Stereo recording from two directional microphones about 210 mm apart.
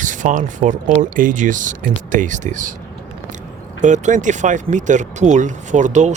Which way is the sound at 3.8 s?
35° right (ahead or behind).